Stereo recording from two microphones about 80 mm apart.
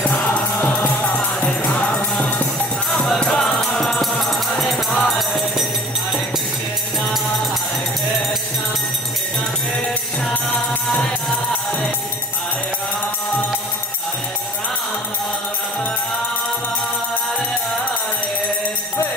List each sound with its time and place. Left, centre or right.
0.0 s music: centre
2.9 s music: centre